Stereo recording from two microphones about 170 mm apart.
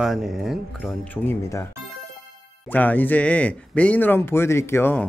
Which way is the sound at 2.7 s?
10° left (ahead or behind).